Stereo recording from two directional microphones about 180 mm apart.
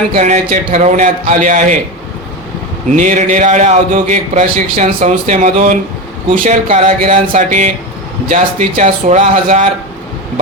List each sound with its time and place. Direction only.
0.1 s a man's voice: 40° right (ahead or behind)
2.9 s a man's voice: 40° right (ahead or behind)